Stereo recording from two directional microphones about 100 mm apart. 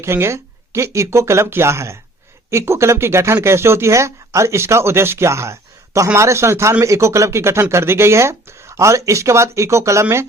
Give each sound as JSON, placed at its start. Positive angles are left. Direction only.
{"t": 0.0, "sound": "speech", "side_deg": -25}